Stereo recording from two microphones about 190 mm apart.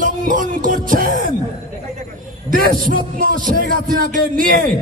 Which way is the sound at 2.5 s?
45° right (ahead or behind).